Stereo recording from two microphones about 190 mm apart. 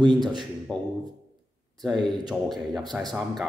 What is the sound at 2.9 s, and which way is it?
Speech, 10° right (ahead or behind).